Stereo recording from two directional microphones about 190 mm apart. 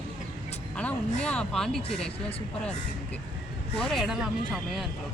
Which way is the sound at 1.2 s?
5° left (ahead or behind).